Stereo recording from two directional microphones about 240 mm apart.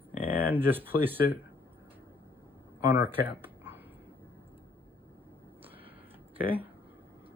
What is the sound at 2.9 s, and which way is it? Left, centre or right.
Speech, centre.